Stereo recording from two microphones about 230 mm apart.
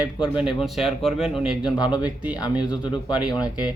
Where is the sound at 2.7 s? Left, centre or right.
Centre.